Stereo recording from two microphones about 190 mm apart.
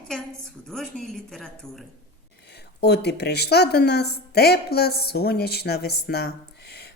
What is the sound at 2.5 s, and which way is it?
A woman's voice, 60° left (ahead or behind).